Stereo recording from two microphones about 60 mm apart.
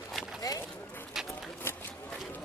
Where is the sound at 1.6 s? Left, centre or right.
Left.